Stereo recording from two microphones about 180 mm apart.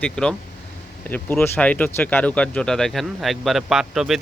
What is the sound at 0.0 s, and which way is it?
A man's voice, 5° left (ahead or behind).